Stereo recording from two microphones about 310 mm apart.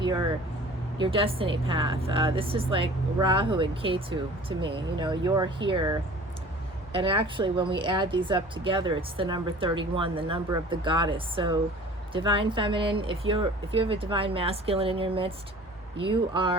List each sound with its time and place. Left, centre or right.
0.0 s speech: centre